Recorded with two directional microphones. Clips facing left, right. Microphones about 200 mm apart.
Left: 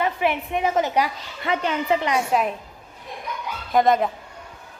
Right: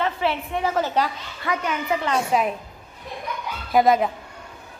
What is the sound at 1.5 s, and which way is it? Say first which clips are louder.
Speech: left 3 dB; 25° left (ahead or behind).